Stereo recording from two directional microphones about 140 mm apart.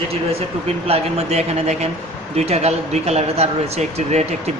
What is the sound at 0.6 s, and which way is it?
Speech, 50° right (ahead or behind).